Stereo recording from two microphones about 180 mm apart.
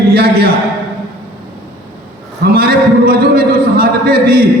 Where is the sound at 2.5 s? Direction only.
55° right (ahead or behind).